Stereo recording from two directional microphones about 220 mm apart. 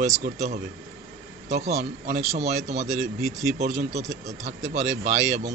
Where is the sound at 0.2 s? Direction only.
30° right (ahead or behind).